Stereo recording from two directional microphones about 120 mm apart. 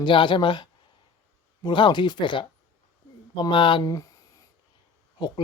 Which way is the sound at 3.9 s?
30° left (ahead or behind).